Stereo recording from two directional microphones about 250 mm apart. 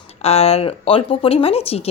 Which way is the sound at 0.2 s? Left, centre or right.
Left.